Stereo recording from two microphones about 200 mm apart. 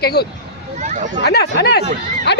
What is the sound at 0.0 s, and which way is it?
Speech, 50° left (ahead or behind).